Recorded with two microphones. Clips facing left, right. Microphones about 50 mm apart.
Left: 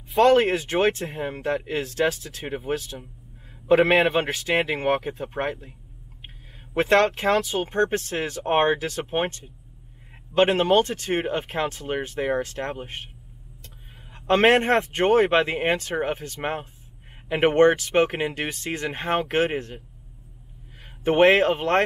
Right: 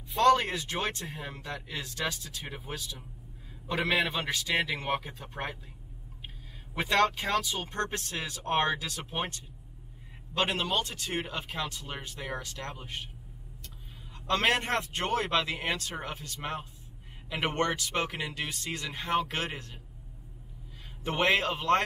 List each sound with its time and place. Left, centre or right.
0.2 s a man's voice: left
4.3 s speech: left
6.2 s a sound: left
7.3 s speech: left
14.1 s speech: left
21.0 s speech: left